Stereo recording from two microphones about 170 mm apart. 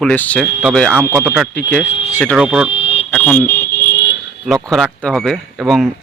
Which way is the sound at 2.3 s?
5° right (ahead or behind).